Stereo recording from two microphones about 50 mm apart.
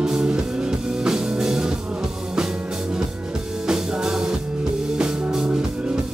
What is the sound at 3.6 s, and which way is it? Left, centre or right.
Music, centre.